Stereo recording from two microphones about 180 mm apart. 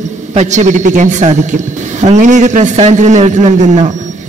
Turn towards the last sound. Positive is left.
turn(degrees=-40)  # may be behind; listen again after turning